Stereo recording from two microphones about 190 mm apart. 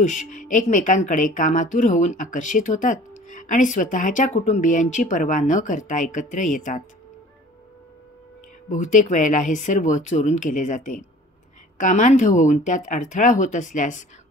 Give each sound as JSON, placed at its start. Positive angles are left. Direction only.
{"t": 0.0, "sound": "speech", "side_deg": 40}
{"t": 8.6, "sound": "speech", "side_deg": 40}